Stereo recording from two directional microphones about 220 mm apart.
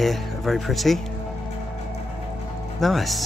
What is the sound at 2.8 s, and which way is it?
Speech, centre (ahead or behind).